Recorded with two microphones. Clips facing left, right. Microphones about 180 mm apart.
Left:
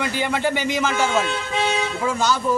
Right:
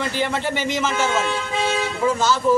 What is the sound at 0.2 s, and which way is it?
Speech, centre (ahead or behind).